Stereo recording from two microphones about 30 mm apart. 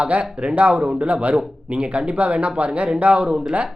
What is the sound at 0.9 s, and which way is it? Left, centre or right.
Speech, right.